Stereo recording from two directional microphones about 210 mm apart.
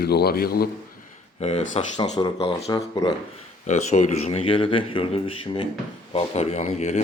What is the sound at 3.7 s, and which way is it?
Speech, 35° left (ahead or behind).